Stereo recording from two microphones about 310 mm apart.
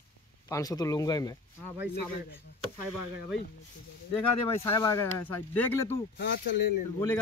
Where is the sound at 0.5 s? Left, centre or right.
Centre.